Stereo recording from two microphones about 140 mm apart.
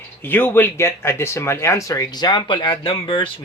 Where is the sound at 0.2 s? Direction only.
15° left (ahead or behind).